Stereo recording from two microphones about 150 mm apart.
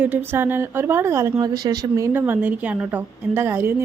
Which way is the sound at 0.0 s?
15° right (ahead or behind).